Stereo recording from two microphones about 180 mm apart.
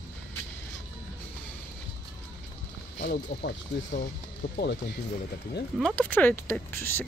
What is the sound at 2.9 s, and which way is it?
Speech, 65° left (ahead or behind).